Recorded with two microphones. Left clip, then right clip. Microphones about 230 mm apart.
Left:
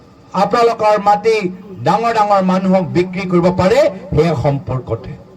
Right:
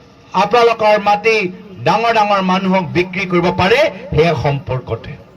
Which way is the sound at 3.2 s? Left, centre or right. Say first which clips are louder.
Left 1 dB; left.